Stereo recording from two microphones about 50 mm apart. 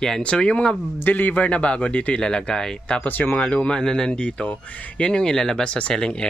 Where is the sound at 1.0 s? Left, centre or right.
Left.